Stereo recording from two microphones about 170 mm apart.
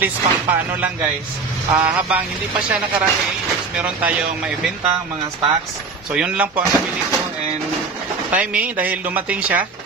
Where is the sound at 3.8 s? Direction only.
5° right (ahead or behind).